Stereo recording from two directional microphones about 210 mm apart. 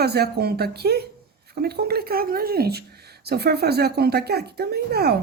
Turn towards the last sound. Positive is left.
turn(degrees=-50)  # may be behind; listen again after turning